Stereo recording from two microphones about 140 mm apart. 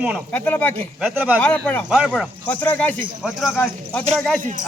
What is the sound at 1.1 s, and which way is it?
Speech, 10° right (ahead or behind).